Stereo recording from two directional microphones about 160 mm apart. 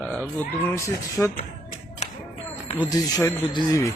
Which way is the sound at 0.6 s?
20° left (ahead or behind).